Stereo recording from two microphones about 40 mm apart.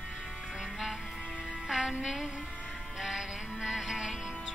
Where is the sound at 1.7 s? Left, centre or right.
Centre.